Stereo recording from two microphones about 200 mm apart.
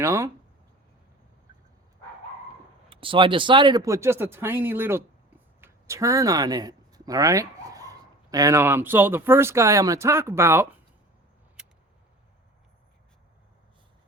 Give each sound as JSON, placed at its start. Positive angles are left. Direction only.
{"t": 0.0, "sound": "speech", "side_deg": -15}
{"t": 2.9, "sound": "speech", "side_deg": -25}
{"t": 11.6, "sound": "a sound", "side_deg": -5}